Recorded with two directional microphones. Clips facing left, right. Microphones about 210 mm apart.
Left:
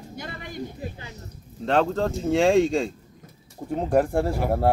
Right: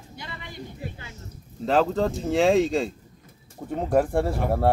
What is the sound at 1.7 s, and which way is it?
Speech, centre (ahead or behind).